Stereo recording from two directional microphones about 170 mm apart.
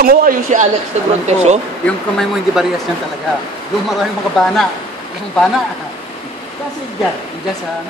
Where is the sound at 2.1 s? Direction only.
5° right (ahead or behind).